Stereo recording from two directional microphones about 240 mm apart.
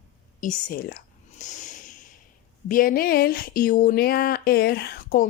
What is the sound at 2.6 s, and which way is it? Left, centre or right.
Speech, left.